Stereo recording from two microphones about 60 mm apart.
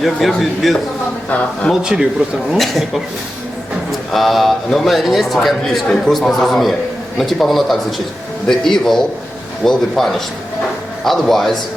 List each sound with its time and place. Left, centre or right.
0.0 s a man's voice: centre
1.3 s speech: left
1.8 s speech: centre
2.6 s a man's voice: centre
4.1 s a man's voice: centre